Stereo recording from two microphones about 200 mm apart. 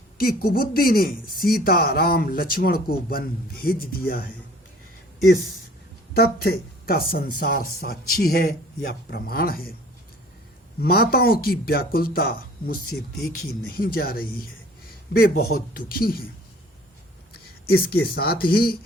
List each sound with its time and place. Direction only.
0.2 s speech: 50° left (ahead or behind)
6.1 s speech: 50° left (ahead or behind)
10.8 s speech: 50° left (ahead or behind)
17.3 s speech: 50° left (ahead or behind)